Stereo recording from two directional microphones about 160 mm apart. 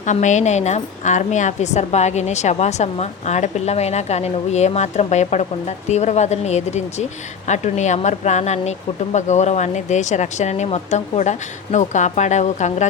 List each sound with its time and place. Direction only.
0.0 s a woman's voice: 50° left (ahead or behind)